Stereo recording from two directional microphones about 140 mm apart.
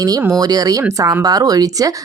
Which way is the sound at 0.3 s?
25° right (ahead or behind).